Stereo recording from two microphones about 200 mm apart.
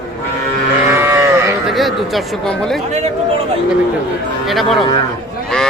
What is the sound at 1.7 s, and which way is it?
Speech, centre (ahead or behind).